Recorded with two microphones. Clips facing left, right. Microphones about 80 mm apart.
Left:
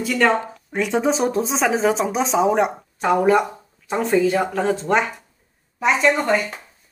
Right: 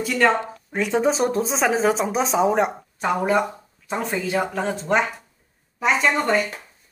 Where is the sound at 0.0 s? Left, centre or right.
Centre.